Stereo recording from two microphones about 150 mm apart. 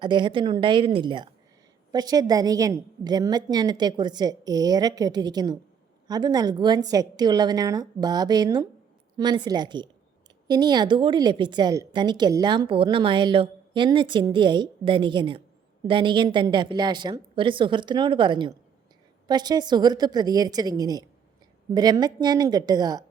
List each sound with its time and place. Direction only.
0.0 s a woman's voice: 30° right (ahead or behind)